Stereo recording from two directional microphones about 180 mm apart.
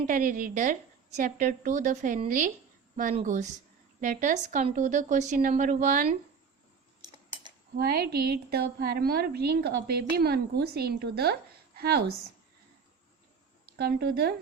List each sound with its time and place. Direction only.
0.1 s a woman's voice: 50° right (ahead or behind)
7.8 s a woman's voice: 60° right (ahead or behind)
13.7 s a woman's voice: 60° right (ahead or behind)